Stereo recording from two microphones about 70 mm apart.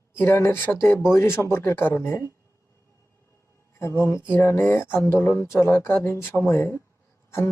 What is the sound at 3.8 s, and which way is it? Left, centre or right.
Speech, left.